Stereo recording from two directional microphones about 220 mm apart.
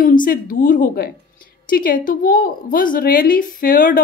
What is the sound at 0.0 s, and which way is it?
A woman's voice, 40° left (ahead or behind).